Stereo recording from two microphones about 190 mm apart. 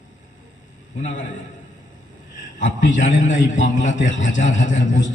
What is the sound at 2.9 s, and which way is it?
A man's voice, 40° left (ahead or behind).